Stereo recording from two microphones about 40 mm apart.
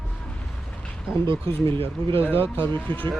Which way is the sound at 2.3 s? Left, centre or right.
Left.